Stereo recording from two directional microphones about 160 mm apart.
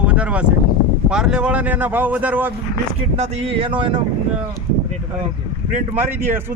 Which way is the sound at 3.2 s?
35° right (ahead or behind).